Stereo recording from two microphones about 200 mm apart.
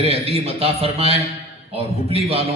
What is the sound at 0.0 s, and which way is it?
A man's voice, 30° right (ahead or behind).